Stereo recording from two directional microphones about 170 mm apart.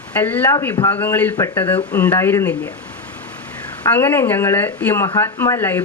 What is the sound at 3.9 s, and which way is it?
Speech, 15° left (ahead or behind).